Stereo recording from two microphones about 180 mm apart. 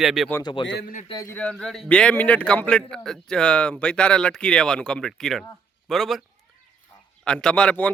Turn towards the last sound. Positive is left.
turn(degrees=5)  # may be behind; listen again after turning